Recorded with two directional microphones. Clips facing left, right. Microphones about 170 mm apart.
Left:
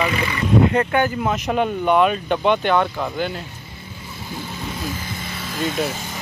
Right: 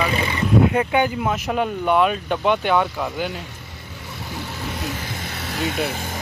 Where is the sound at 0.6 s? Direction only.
5° right (ahead or behind).